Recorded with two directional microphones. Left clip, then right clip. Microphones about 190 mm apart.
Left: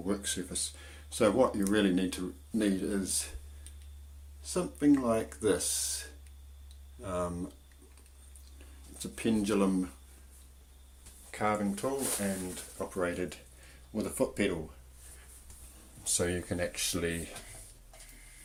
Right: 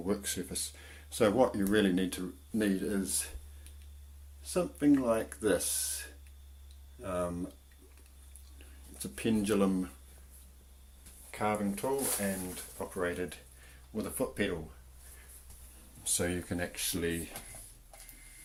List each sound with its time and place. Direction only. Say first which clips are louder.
0.0 s speech: even; 10° right (ahead or behind)
4.4 s speech: left 1 dB; 5° right (ahead or behind)
9.0 s speech: left 1 dB; 5° right (ahead or behind)
11.3 s speech: left 2 dB; centre (ahead or behind)
16.1 s speech: left 2 dB; 10° left (ahead or behind)